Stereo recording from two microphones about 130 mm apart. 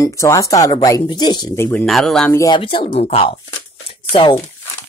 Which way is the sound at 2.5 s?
40° left (ahead or behind).